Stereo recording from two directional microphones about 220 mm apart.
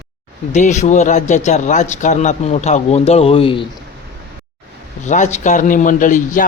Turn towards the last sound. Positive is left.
turn(degrees=35)  # may be behind; listen again after turning